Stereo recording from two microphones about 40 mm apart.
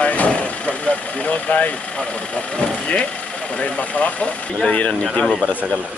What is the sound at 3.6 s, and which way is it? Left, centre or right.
Speech, left.